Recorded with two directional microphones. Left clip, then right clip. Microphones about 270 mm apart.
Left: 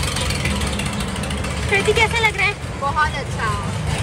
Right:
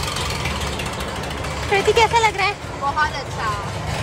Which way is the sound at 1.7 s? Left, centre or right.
Centre.